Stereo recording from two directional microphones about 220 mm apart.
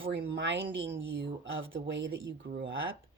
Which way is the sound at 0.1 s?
50° right (ahead or behind).